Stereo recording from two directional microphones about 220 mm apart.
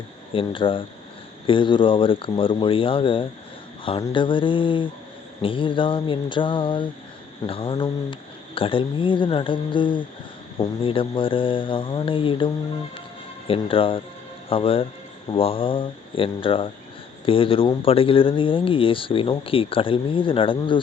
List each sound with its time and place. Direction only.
0.3 s speech: 25° left (ahead or behind)
13.5 s speech: 25° left (ahead or behind)